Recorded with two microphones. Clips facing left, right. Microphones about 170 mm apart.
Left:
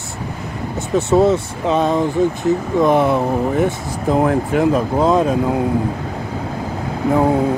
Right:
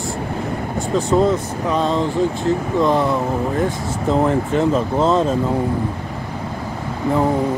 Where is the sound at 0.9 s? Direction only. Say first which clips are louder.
Left 3 dB; 20° left (ahead or behind).